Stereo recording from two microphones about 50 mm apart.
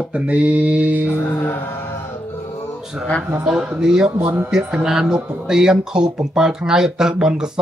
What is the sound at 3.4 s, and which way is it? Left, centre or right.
Speech, centre.